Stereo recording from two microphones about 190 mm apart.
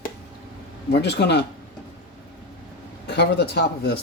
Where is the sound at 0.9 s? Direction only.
60° left (ahead or behind).